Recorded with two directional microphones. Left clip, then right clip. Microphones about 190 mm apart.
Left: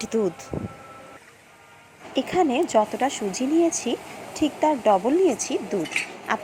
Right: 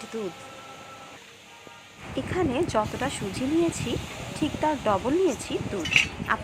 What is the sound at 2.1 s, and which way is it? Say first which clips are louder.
A woman's voice: left 5 dB; 15° left (ahead or behind).